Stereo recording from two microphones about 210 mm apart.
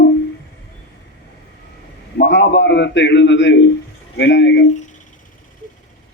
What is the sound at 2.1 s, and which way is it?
A man's voice, 55° left (ahead or behind).